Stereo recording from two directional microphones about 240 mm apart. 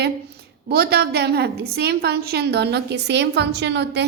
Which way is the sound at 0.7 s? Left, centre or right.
Right.